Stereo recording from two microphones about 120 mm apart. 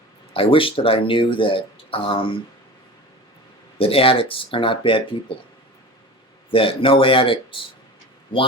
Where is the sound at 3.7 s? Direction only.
50° left (ahead or behind).